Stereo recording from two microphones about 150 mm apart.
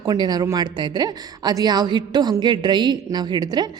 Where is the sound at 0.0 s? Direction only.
25° right (ahead or behind).